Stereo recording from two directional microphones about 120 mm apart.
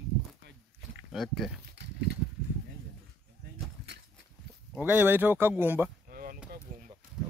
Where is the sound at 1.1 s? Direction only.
Centre (ahead or behind).